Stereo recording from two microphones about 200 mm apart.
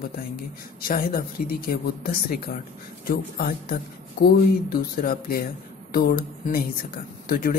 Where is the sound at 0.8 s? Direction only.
45° left (ahead or behind).